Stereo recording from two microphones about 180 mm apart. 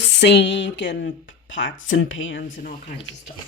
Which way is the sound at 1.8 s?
90° left.